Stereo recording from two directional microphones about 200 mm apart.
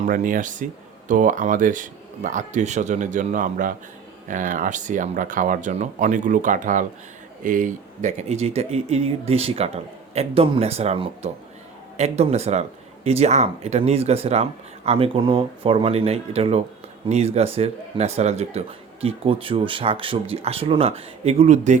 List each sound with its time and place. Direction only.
0.0 s speech: 40° right (ahead or behind)